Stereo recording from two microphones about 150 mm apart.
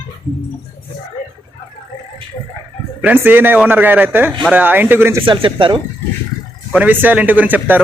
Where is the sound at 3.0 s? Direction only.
15° right (ahead or behind).